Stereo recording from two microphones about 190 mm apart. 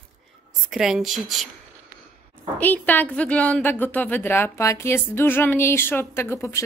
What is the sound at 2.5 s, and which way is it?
A woman's voice, 10° left (ahead or behind).